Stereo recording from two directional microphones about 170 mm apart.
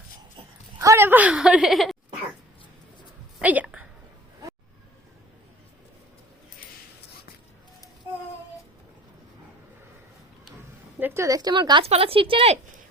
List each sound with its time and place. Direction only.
0.3 s a sound: 20° right (ahead or behind); by 2.0 s centre (ahead or behind)
3.3 s a woman's voice: 10° right (ahead or behind)
11.0 s speech: 15° right (ahead or behind); by 12.5 s 35° right (ahead or behind)